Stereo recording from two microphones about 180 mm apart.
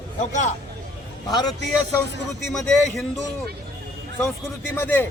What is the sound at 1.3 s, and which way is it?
Speech, 25° left (ahead or behind).